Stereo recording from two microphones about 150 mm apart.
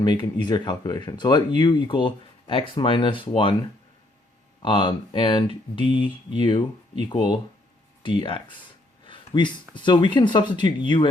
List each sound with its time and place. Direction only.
0.0 s speech: 30° left (ahead or behind)
4.6 s speech: 35° left (ahead or behind)
9.0 s a sound: 30° left (ahead or behind)
9.7 s speech: 30° left (ahead or behind)